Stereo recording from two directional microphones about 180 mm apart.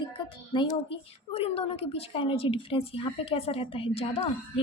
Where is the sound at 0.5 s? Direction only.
30° left (ahead or behind).